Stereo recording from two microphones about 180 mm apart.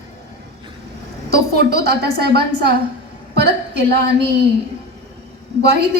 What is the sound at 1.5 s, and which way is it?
A woman's voice, 60° right (ahead or behind).